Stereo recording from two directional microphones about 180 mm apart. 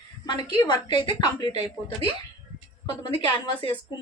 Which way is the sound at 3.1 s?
25° left (ahead or behind).